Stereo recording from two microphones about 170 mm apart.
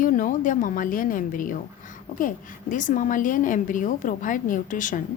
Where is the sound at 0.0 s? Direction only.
50° left (ahead or behind).